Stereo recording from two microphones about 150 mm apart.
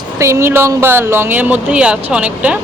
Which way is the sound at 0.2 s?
20° right (ahead or behind).